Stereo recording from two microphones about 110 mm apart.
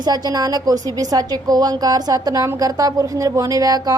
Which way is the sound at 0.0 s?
35° right (ahead or behind).